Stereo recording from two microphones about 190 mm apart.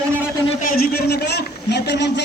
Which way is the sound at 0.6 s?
50° left (ahead or behind).